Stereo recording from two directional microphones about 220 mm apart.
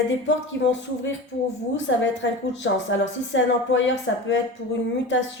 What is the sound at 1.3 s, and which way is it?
A woman's voice, 50° left (ahead or behind).